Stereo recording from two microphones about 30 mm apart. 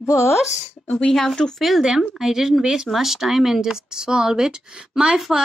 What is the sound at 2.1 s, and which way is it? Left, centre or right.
A woman's voice, centre.